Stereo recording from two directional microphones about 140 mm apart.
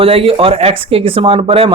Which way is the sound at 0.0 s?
45° right (ahead or behind).